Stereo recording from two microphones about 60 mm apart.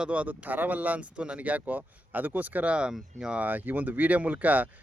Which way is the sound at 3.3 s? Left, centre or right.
Right.